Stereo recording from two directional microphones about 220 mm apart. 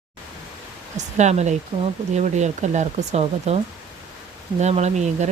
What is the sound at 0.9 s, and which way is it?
Speech, 30° right (ahead or behind).